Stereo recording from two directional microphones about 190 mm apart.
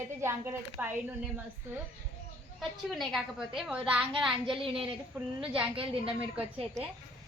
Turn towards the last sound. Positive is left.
turn(degrees=-5)  # may be behind; listen again after turning